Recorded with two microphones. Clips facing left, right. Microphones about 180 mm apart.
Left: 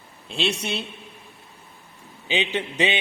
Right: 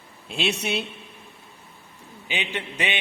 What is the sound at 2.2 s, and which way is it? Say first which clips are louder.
Speech: left 5 dB; 25° left (ahead or behind).